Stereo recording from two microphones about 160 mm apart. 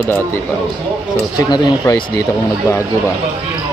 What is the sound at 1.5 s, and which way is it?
Speech, 25° left (ahead or behind).